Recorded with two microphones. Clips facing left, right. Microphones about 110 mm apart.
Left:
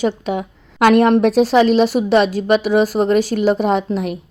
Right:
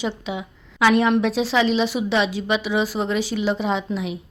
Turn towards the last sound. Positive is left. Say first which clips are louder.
# left 6 dB
turn(degrees=50)  # may be behind; listen again after turning